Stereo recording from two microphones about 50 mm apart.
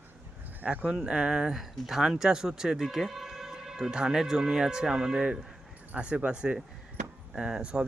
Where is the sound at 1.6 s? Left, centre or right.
Centre.